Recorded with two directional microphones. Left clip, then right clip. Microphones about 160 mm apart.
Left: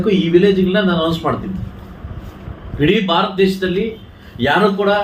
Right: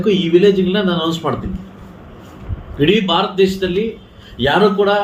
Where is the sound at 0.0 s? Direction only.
15° right (ahead or behind).